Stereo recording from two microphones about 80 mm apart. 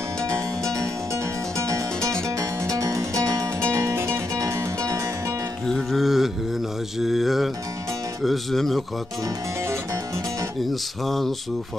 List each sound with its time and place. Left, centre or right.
2.6 s music: right
3.7 s music: right
4.4 s music: right
5.7 s music: centre
8.2 s speech: centre
10.7 s speech: centre